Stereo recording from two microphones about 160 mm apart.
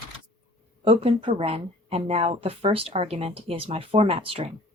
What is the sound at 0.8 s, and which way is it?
Speech, 35° right (ahead or behind).